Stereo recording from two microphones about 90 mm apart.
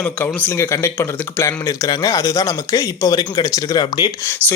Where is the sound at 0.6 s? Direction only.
30° left (ahead or behind).